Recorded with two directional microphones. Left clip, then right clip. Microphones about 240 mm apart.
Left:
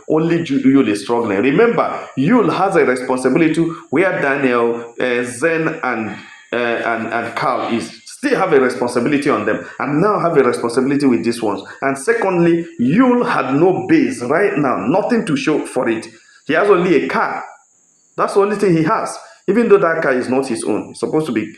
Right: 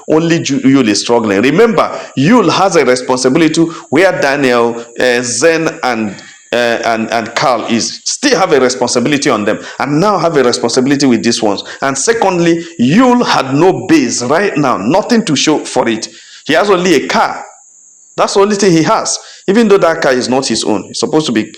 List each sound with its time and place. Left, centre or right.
0.1 s speech: right